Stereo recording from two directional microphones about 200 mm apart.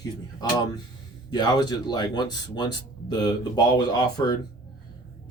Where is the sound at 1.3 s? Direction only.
20° left (ahead or behind).